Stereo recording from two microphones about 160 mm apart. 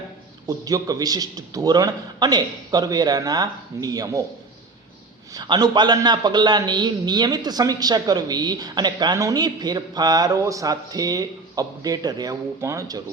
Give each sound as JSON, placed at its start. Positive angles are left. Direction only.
{"t": 0.4, "sound": "a man's voice", "side_deg": -20}
{"t": 5.3, "sound": "a man's voice", "side_deg": -25}